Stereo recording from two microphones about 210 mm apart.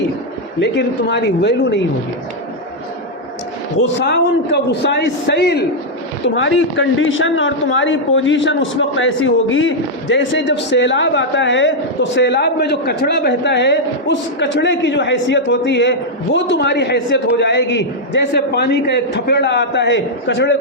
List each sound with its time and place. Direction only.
0.6 s a man's voice: 55° left (ahead or behind)
3.8 s a man's voice: 60° left (ahead or behind)